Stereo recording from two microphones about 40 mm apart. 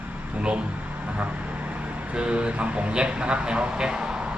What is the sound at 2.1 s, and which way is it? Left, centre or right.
Speech, right.